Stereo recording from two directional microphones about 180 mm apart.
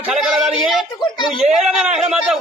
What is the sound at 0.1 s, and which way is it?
A man's voice, centre (ahead or behind).